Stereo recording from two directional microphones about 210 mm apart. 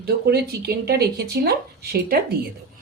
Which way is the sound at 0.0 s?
50° right (ahead or behind).